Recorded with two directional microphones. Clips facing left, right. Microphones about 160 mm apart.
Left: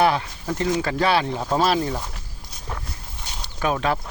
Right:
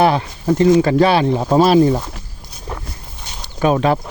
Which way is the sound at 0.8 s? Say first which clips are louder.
Right 8 dB; 25° right (ahead or behind).